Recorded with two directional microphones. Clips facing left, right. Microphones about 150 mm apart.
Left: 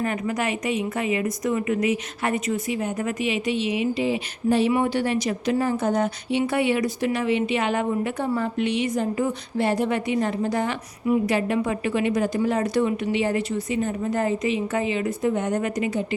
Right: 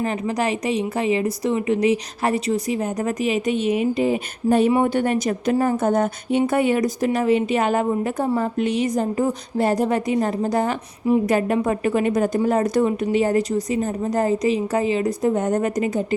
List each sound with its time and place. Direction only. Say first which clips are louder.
0.0 s a woman's voice: right 3 dB; 30° right (ahead or behind)